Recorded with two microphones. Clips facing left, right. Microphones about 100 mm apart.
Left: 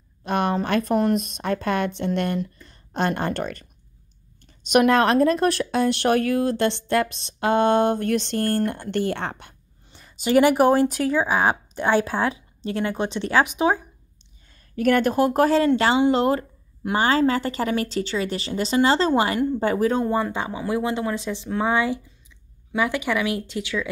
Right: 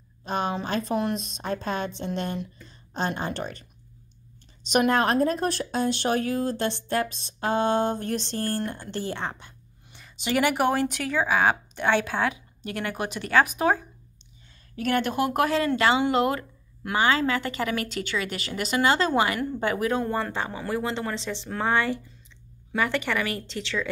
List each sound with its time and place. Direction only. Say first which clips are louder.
0.2 s a woman's voice: left 5 dB; 65° left (ahead or behind)
4.6 s speech: left 5 dB; 60° left (ahead or behind)
9.9 s a sound: left 7 dB; 40° left (ahead or behind)
10.6 s a woman's voice: left 6 dB; 35° left (ahead or behind)
14.8 s a woman's voice: left 6 dB; 45° left (ahead or behind)
20.1 s speech: left 4 dB; 15° left (ahead or behind)